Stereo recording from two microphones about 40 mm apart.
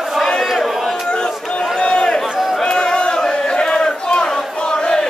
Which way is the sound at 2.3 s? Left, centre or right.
Centre.